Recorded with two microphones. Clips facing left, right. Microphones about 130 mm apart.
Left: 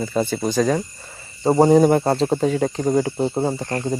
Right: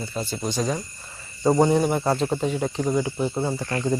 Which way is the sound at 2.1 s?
45° left (ahead or behind).